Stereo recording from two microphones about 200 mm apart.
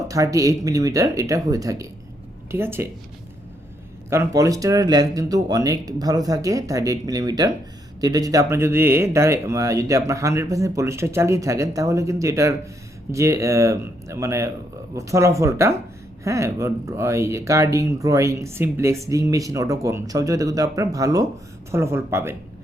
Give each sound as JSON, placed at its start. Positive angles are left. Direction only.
{"t": 0.1, "sound": "speech", "side_deg": -15}
{"t": 4.1, "sound": "speech", "side_deg": -15}